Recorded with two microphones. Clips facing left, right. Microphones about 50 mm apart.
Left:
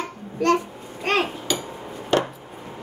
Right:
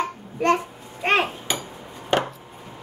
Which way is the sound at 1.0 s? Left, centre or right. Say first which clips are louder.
Right 1 dB; right.